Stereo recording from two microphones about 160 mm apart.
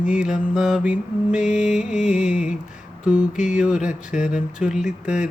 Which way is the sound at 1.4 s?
45° left (ahead or behind).